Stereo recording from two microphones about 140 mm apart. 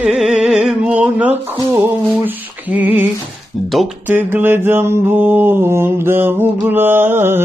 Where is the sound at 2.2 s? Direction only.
10° right (ahead or behind).